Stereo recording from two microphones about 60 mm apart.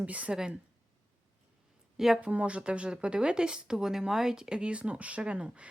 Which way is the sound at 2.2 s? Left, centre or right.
Right.